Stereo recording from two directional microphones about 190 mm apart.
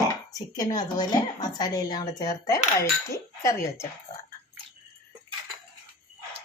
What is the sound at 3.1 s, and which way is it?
Speech, 15° left (ahead or behind).